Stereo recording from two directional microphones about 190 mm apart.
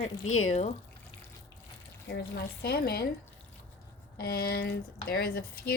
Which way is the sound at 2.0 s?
55° left (ahead or behind).